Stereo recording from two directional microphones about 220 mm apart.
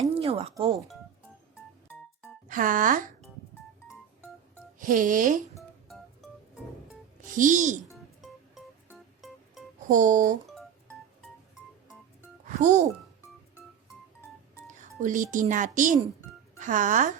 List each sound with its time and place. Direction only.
0.1 s a sound: 25° right (ahead or behind)
0.5 s speech: 15° right (ahead or behind)
2.5 s speech: 40° right (ahead or behind)
4.8 s speech: 35° right (ahead or behind)
7.2 s speech: 35° right (ahead or behind)
7.9 s music: centre (ahead or behind)
9.9 s speech: 35° right (ahead or behind)
10.5 s music: centre (ahead or behind)
12.5 s speech: 35° right (ahead or behind)
14.7 s speech: 35° right (ahead or behind)